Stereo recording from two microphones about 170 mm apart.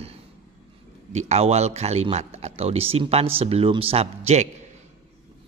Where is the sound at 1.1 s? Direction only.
40° right (ahead or behind).